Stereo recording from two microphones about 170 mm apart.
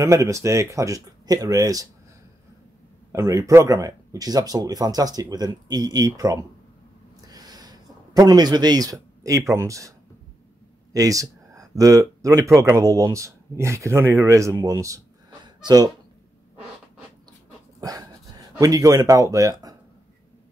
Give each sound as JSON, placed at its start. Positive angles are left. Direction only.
{"t": 0.0, "sound": "speech", "side_deg": -20}
{"t": 3.1, "sound": "speech", "side_deg": -15}
{"t": 7.2, "sound": "a sound", "side_deg": -25}
{"t": 10.9, "sound": "speech", "side_deg": -20}
{"t": 15.4, "sound": "a sound", "side_deg": -25}
{"t": 17.7, "sound": "dog", "side_deg": -20}
{"t": 18.6, "sound": "speech", "side_deg": -20}